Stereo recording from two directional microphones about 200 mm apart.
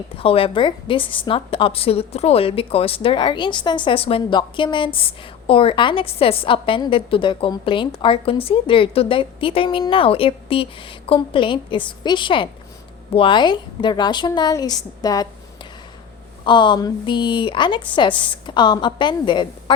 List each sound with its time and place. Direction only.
0.2 s a woman's voice: 25° left (ahead or behind)
16.4 s a woman's voice: 25° left (ahead or behind)